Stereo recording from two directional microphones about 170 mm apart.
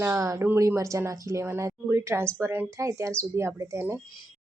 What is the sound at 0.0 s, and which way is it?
Speech, 15° right (ahead or behind).